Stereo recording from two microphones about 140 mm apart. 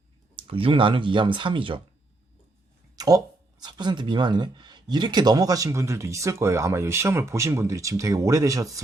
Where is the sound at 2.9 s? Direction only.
25° right (ahead or behind).